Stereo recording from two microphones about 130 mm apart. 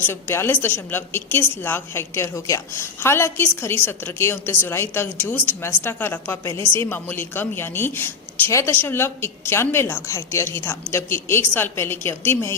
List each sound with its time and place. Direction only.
0.0 s a woman's voice: 20° left (ahead or behind)